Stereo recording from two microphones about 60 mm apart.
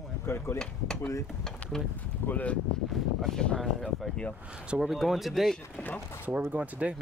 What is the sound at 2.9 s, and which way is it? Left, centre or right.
Speech, centre.